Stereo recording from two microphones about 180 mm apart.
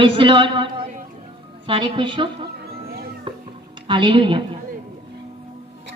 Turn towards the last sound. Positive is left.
turn(degrees=-30)  # may be behind; listen again after turning